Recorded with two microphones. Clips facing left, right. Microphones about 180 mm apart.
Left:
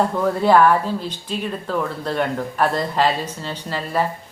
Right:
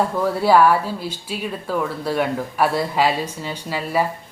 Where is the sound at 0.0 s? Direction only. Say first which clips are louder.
Left 1 dB; 5° right (ahead or behind).